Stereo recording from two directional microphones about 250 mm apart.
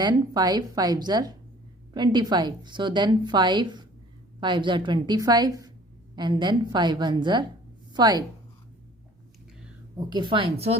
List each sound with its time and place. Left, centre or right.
0.0 s a woman's voice: centre
10.1 s speech: centre